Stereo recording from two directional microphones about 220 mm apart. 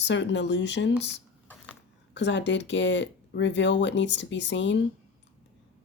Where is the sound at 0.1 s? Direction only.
55° left (ahead or behind).